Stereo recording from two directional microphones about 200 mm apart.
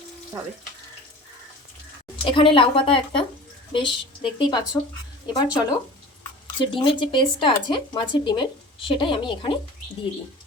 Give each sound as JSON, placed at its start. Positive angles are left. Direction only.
{"t": 2.2, "sound": "speech", "side_deg": 25}